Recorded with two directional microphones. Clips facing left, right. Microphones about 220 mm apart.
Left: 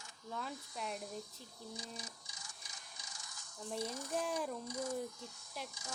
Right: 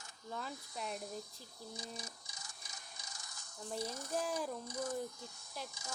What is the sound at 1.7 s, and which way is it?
Printer, 40° right (ahead or behind).